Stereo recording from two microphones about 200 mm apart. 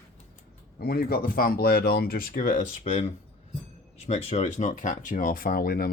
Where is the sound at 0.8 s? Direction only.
50° left (ahead or behind).